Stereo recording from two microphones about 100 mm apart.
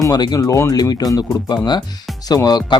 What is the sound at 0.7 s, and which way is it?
Speech, 40° left (ahead or behind).